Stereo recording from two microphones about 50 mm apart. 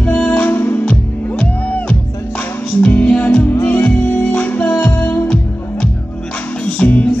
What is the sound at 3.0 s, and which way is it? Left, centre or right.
Music, left.